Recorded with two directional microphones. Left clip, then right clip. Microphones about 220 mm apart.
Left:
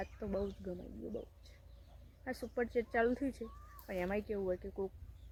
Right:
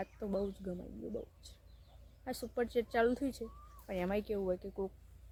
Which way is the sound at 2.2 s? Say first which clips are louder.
Right 1 dB; 10° right (ahead or behind).